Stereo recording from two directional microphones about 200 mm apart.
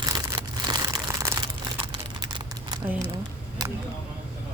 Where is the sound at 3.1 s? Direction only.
20° right (ahead or behind).